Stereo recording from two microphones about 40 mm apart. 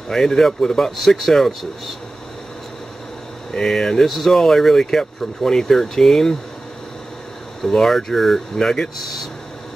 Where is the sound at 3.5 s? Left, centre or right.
Centre.